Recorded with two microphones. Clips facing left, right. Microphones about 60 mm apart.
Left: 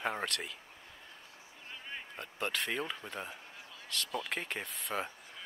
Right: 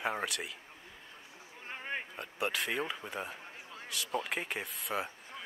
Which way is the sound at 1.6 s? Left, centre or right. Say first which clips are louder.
Right 6 dB; right.